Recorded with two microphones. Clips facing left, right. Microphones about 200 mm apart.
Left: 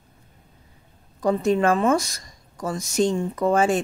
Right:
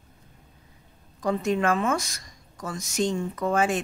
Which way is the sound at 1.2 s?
35° left (ahead or behind).